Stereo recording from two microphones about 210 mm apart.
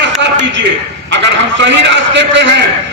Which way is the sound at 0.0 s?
55° right (ahead or behind).